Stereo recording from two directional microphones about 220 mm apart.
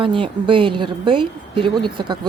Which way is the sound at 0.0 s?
25° right (ahead or behind).